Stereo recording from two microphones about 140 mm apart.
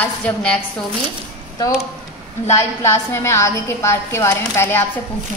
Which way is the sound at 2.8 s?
20° left (ahead or behind).